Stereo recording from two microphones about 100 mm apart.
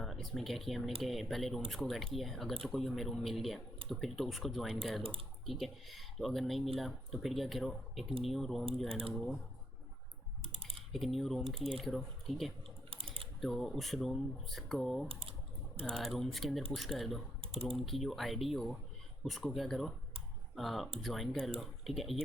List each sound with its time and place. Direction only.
0.0 s speech: centre (ahead or behind)
10.5 s typing: 70° right (ahead or behind)
10.9 s speech: centre (ahead or behind)
12.9 s typing: 65° right (ahead or behind)
13.4 s speech: centre (ahead or behind)
15.0 s typing: 65° right (ahead or behind)
15.9 s speech: centre (ahead or behind)
17.4 s typing: 70° right (ahead or behind)
17.7 s speech: centre (ahead or behind)